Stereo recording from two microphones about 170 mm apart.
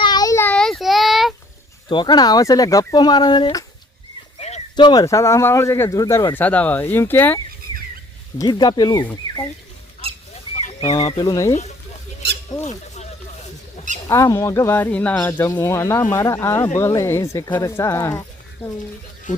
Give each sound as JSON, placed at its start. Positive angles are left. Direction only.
{"t": 0.0, "sound": "child singing", "side_deg": 25}
{"t": 0.5, "sound": "child singing", "side_deg": 0}
{"t": 1.9, "sound": "speech", "side_deg": 25}
{"t": 4.4, "sound": "a sound", "side_deg": 40}
{"t": 4.8, "sound": "speech", "side_deg": 25}
{"t": 8.4, "sound": "speech", "side_deg": 25}
{"t": 10.8, "sound": "speech", "side_deg": 30}
{"t": 12.5, "sound": "rodents", "side_deg": 20}
{"t": 14.1, "sound": "speech", "side_deg": 20}